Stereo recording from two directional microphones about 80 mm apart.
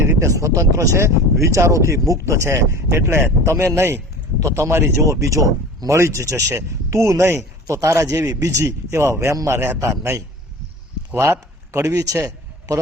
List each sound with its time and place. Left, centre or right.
0.0 s speech: right
11.1 s a sound: right
11.9 s a man's voice: right